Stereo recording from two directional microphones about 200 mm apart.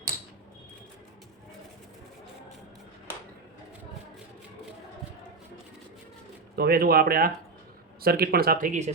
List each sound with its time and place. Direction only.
6.6 s speech: 50° right (ahead or behind)